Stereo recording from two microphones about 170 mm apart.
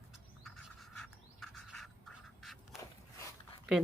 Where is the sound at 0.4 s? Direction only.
Centre (ahead or behind).